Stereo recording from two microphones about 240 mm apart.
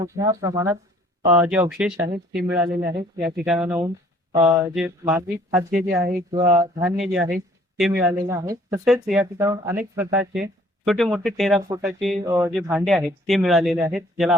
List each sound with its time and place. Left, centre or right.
0.0 s speech: centre
2.0 s speech: right
3.2 s speech: centre
6.9 s speech: centre
8.8 s speech: centre
12.2 s speech: centre